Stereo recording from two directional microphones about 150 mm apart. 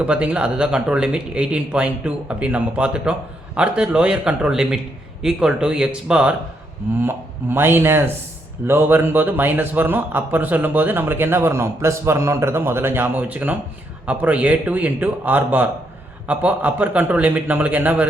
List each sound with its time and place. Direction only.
0.0 s a man's voice: 10° right (ahead or behind)
7.5 s a man's voice: 15° right (ahead or behind)